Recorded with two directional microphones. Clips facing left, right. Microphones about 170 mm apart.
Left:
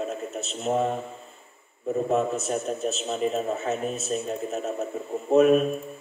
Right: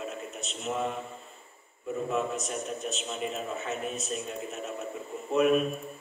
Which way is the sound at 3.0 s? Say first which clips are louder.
Left 8 dB; 40° left (ahead or behind).